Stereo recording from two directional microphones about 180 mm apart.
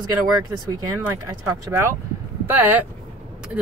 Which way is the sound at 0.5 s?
20° right (ahead or behind).